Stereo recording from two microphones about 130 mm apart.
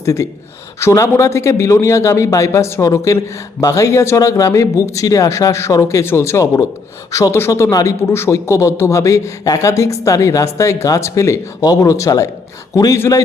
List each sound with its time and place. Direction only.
0.0 s speech: 25° left (ahead or behind)